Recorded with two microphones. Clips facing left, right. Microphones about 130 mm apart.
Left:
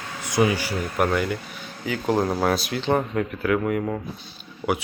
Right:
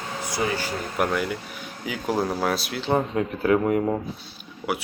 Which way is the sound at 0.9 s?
Centre (ahead or behind).